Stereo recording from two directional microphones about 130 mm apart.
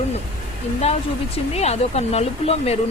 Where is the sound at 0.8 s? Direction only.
55° left (ahead or behind).